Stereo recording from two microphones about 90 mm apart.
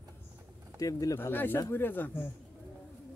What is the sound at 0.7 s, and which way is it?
Speech, 40° left (ahead or behind).